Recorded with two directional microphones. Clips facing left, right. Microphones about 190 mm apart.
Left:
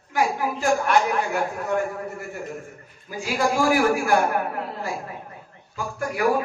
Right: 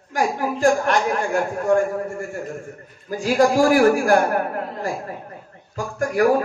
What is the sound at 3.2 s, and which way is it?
Speech, 45° right (ahead or behind).